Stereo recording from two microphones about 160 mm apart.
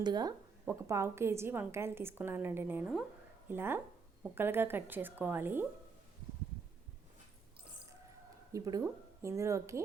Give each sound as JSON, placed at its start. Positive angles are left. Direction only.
{"t": 0.0, "sound": "a woman's voice", "side_deg": -25}
{"t": 8.5, "sound": "a woman's voice", "side_deg": -20}